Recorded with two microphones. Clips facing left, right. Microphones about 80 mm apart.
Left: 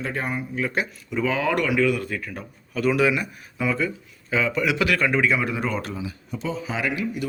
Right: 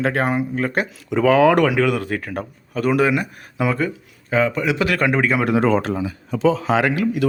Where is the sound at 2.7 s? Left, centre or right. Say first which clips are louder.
Right 3 dB; right.